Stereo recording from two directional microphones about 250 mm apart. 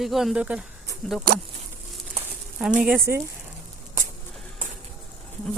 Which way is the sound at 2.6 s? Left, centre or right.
Centre.